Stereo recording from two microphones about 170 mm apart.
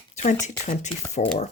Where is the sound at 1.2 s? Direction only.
50° left (ahead or behind).